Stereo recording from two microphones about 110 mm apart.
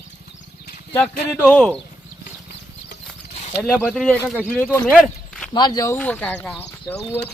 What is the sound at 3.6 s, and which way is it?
Speech, 5° left (ahead or behind).